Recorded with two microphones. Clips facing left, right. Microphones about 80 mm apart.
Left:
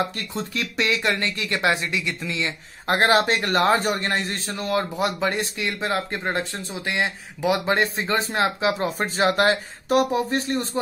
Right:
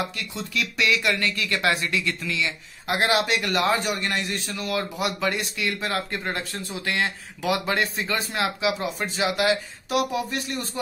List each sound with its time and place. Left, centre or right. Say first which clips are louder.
0.0 s speech: left 4 dB; left
2.9 s a man's voice: left 4 dB; left